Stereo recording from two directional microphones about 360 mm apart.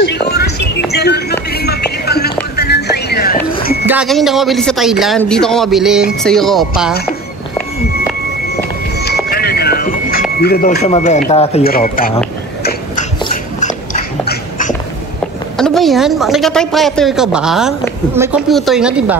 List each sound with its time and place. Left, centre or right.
0.0 s music: left
3.5 s a sound: left
3.8 s a woman's voice: centre
8.5 s a sound: left
10.4 s speech: left
13.2 s dog: centre
15.5 s a woman's voice: centre